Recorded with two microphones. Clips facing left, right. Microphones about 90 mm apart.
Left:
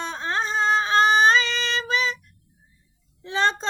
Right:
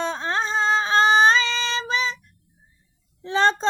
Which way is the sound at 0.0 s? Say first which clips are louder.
Right 2 dB; 35° right (ahead or behind).